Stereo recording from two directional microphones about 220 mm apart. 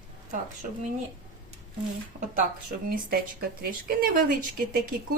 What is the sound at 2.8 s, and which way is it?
A woman's voice, 40° right (ahead or behind).